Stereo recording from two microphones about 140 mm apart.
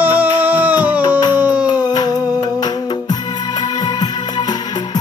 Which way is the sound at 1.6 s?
30° left (ahead or behind).